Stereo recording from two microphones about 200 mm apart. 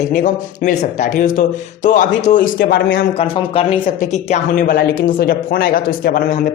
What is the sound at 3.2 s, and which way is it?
Speech, 30° left (ahead or behind).